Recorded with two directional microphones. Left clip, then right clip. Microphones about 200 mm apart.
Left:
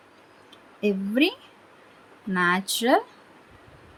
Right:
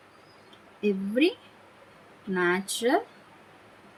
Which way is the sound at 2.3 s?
50° left (ahead or behind).